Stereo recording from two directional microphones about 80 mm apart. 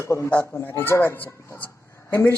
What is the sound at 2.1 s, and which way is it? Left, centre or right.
Speech, left.